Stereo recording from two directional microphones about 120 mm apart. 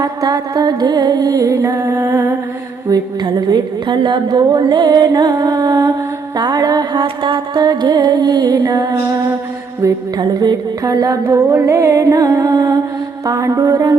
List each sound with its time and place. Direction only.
0.0 s a woman's voice: 30° right (ahead or behind)
9.8 s music: 30° right (ahead or behind)